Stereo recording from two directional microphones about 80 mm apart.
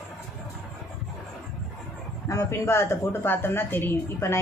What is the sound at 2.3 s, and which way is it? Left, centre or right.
A woman's voice, left.